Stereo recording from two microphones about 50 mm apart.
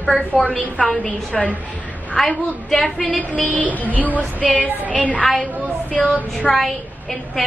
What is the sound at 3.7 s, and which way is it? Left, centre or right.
Speech, left.